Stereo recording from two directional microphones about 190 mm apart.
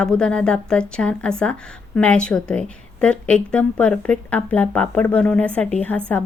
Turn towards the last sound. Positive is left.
turn(degrees=5)  # may be behind; listen again after turning